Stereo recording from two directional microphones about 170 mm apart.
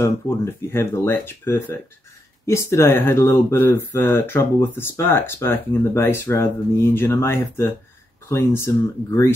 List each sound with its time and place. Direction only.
0.7 s speech: 10° left (ahead or behind)